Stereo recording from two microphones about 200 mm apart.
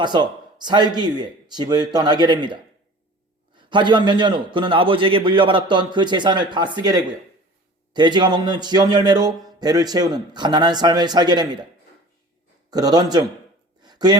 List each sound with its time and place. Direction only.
0.0 s a man's voice: 20° right (ahead or behind)
7.9 s a man's voice: 20° right (ahead or behind)
12.7 s a man's voice: 20° right (ahead or behind)
13.8 s a sound: 20° right (ahead or behind)